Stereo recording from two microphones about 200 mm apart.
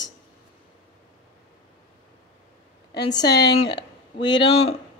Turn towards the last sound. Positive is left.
turn(degrees=25)  # may be behind; listen again after turning